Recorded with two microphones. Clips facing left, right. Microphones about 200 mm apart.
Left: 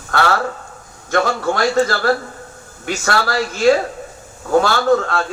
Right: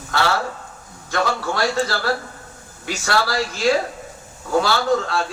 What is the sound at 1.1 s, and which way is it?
A man's voice, 50° left (ahead or behind).